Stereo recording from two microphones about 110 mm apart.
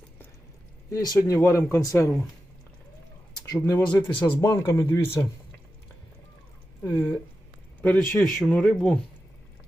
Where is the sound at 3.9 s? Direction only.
45° left (ahead or behind).